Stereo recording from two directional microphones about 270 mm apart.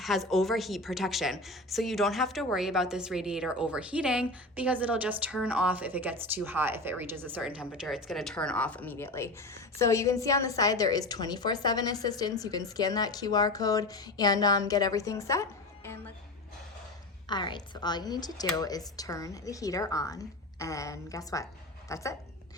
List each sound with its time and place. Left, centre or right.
0.0 s a woman's voice: centre
17.2 s a woman's voice: centre